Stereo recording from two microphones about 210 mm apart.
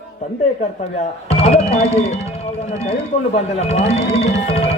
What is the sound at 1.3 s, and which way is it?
A man's voice, 30° left (ahead or behind).